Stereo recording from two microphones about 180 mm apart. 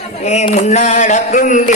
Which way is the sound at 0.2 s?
40° left (ahead or behind).